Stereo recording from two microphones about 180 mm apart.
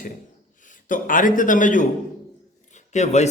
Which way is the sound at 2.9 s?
40° left (ahead or behind).